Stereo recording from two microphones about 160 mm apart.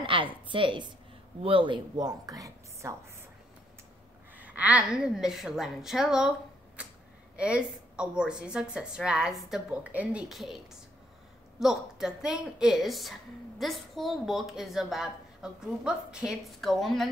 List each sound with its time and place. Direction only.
0.0 s a woman's voice: 30° right (ahead or behind)
4.4 s a woman's voice: 10° right (ahead or behind)
7.3 s a woman's voice: 5° right (ahead or behind)